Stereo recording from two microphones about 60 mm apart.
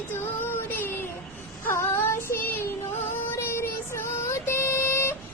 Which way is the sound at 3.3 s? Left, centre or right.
Left.